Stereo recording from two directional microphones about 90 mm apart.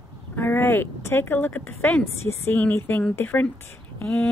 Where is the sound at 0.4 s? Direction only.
25° left (ahead or behind).